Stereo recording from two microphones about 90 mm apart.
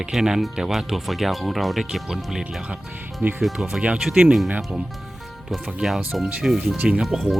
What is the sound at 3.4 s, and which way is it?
Speech, 5° right (ahead or behind).